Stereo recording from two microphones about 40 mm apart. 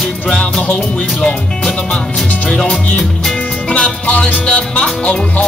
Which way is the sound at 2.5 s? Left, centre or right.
Left.